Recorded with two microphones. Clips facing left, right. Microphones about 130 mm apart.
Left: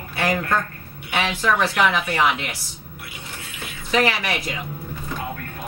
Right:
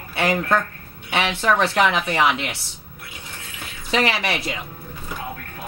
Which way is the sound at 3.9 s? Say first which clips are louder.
Even; 25° right (ahead or behind).